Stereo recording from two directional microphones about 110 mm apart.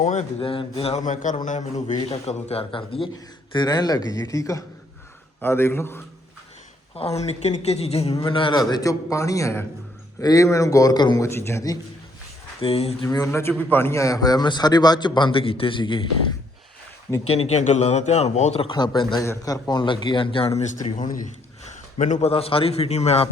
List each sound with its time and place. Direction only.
0.3 s speech: 55° left (ahead or behind)
1.5 s speech: 90° left
2.0 s speech: 65° left (ahead or behind)
3.5 s a man's voice: 40° left (ahead or behind); by 6.0 s 20° left (ahead or behind)
7.2 s a man's voice: 85° left; by 8.2 s 70° left (ahead or behind)
8.3 s a man's voice: 50° left (ahead or behind)
11.2 s a man's voice: 25° left (ahead or behind)
12.6 s speech: 65° left (ahead or behind)
13.1 s a man's voice: 30° left (ahead or behind); by 16.0 s 50° left (ahead or behind)
17.2 s speech: 70° left (ahead or behind)
18.7 s a man's voice: 45° left (ahead or behind)
19.2 s a man's voice: 30° left (ahead or behind); by 20.5 s 50° left (ahead or behind)
20.6 s a man's voice: 90° left; by 23.3 s 70° left (ahead or behind)